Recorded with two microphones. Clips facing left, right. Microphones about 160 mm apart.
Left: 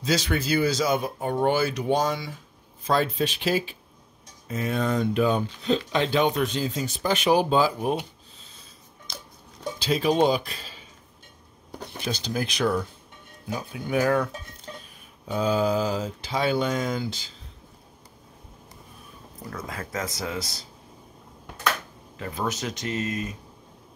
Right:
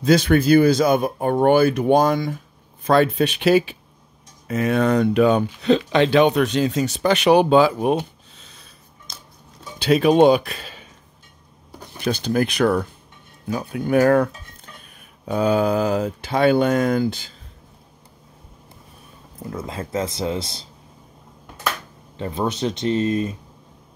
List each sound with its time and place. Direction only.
0.0 s speech: 55° right (ahead or behind)
2.8 s speech: 65° right (ahead or behind)
9.8 s speech: 65° right (ahead or behind)
12.0 s speech: 60° right (ahead or behind)
19.5 s speech: 25° right (ahead or behind)
22.1 s speech: 25° right (ahead or behind)